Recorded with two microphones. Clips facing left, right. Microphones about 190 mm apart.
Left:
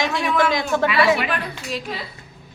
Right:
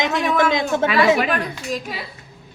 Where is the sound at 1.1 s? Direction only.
45° right (ahead or behind).